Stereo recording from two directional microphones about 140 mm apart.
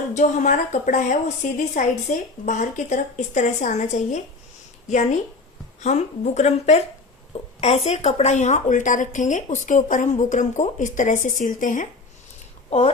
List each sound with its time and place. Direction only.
0.1 s a woman's voice: 55° left (ahead or behind)
5.8 s a woman's voice: 55° left (ahead or behind)